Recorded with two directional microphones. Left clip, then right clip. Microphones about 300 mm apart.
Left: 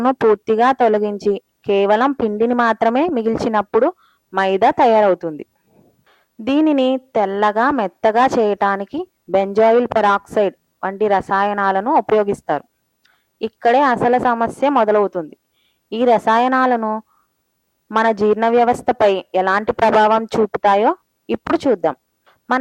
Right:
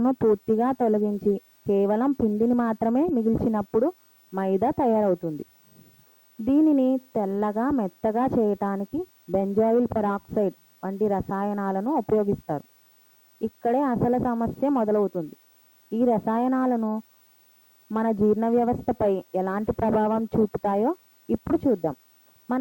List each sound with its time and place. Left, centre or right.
0.0 s speech: centre
1.1 s a woman's voice: left
1.6 s speech: centre
6.4 s speech: centre